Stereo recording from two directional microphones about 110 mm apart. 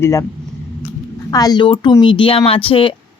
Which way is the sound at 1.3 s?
35° left (ahead or behind).